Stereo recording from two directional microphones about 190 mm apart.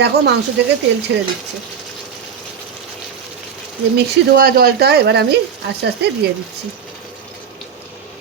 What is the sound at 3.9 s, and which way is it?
Speech, 55° right (ahead or behind).